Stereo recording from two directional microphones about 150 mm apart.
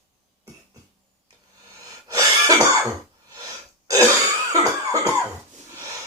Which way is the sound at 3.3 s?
20° right (ahead or behind).